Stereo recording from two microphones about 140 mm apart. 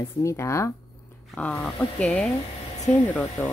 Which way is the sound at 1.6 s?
5° left (ahead or behind).